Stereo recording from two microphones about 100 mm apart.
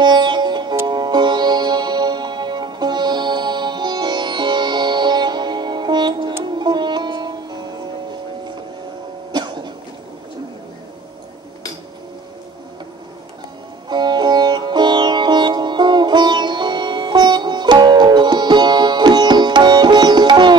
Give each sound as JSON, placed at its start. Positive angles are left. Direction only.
{"t": 0.0, "sound": "sitar", "side_deg": -50}
{"t": 0.8, "sound": "music", "side_deg": -50}
{"t": 9.3, "sound": "cough", "side_deg": -45}
{"t": 13.8, "sound": "music", "side_deg": -45}